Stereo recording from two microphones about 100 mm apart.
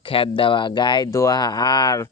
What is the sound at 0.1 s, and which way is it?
Speech, 60° left (ahead or behind).